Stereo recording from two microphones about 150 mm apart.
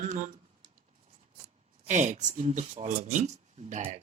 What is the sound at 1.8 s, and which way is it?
Speech, 55° right (ahead or behind).